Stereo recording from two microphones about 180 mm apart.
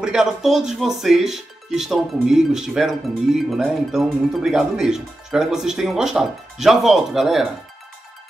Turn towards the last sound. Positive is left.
turn(degrees=0)  # may be behind; listen again after turning